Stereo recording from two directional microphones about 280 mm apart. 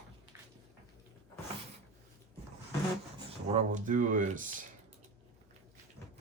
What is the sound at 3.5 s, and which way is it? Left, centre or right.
Speech, right.